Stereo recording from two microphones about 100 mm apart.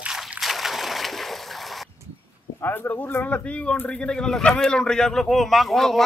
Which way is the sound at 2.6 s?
20° left (ahead or behind).